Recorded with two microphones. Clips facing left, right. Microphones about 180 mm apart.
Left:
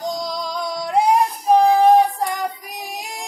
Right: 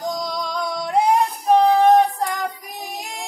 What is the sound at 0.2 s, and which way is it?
Music, centre (ahead or behind).